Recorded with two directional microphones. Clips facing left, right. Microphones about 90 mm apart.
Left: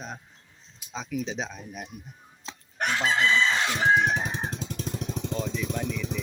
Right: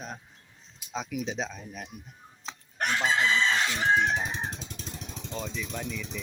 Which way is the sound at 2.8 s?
Centre (ahead or behind).